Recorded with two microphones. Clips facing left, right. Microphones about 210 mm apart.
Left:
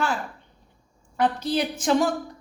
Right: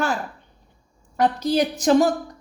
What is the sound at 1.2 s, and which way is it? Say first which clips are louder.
Speech: right 4 dB; 40° right (ahead or behind).